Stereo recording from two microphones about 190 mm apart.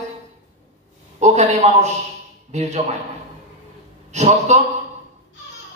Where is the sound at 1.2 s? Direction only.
35° right (ahead or behind).